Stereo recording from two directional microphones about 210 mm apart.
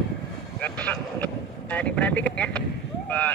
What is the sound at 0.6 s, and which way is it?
Vehicle, 10° left (ahead or behind).